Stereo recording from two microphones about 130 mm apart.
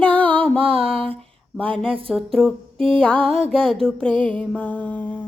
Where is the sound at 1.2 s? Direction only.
5° left (ahead or behind).